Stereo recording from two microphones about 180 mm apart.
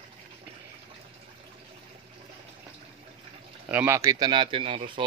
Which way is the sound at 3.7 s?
10° right (ahead or behind).